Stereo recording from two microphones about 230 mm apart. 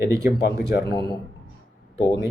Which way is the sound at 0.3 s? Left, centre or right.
Left.